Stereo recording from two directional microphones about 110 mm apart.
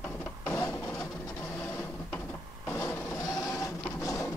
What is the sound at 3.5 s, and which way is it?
Printer, 30° left (ahead or behind).